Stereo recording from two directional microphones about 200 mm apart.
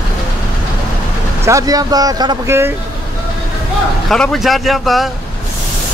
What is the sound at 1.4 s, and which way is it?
Speech, 15° right (ahead or behind).